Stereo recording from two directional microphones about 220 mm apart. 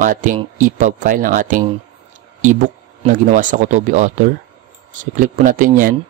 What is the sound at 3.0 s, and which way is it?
Speech, 35° right (ahead or behind).